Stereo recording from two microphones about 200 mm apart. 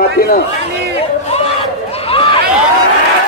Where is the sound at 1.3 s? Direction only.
30° left (ahead or behind).